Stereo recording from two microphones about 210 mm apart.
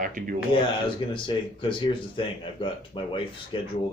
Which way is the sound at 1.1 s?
25° left (ahead or behind).